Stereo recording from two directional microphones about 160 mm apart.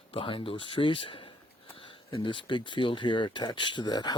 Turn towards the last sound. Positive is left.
turn(degrees=25)  # may be behind; listen again after turning